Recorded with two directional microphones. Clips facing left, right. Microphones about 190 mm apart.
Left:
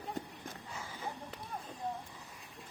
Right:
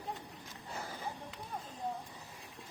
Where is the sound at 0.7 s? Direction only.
40° right (ahead or behind).